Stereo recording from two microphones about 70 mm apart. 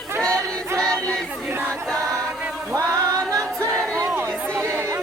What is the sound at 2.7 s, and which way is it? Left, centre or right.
Music, right.